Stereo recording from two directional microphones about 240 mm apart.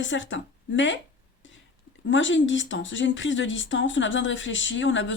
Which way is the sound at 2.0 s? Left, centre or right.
Left.